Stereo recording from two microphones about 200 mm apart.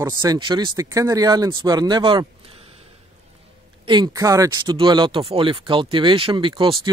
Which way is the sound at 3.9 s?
20° right (ahead or behind).